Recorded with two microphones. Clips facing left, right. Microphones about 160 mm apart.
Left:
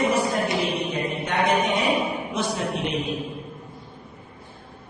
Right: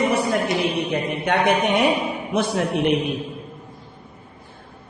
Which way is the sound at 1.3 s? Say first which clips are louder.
Right 3 dB; 65° right (ahead or behind).